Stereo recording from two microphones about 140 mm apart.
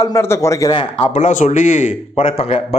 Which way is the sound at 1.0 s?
55° left (ahead or behind).